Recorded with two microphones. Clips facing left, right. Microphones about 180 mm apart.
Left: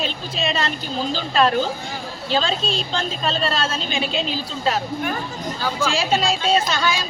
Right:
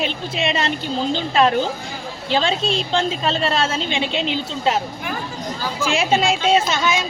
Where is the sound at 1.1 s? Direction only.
20° right (ahead or behind).